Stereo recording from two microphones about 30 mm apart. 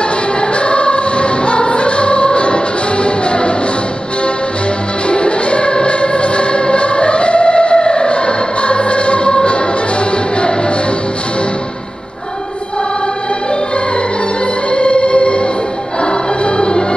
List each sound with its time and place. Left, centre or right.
0.4 s music: left
5.0 s music: left
14.7 s organ: left
16.0 s music: left